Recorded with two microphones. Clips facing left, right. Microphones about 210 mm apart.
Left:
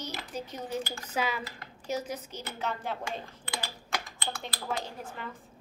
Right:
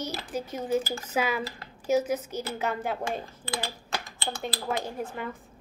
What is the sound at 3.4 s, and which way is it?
Typing, 35° right (ahead or behind).